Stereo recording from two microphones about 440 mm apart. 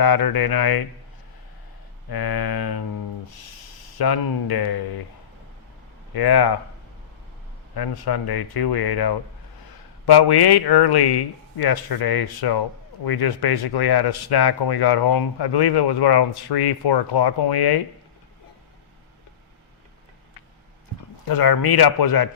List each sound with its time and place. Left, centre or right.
0.0 s speech: left
2.0 s speech: left
3.9 s speech: left
6.1 s speech: left
7.8 s speech: left
21.2 s speech: left